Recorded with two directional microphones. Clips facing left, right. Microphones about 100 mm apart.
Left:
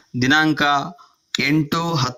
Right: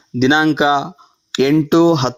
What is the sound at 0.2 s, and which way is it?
Speech, 15° right (ahead or behind).